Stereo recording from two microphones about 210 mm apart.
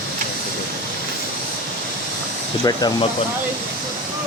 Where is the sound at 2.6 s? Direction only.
20° left (ahead or behind).